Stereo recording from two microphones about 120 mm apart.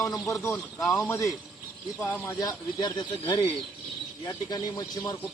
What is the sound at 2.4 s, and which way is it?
A man's voice, 35° left (ahead or behind).